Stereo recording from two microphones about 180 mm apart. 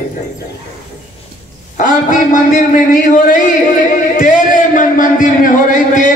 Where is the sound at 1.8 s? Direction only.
45° left (ahead or behind).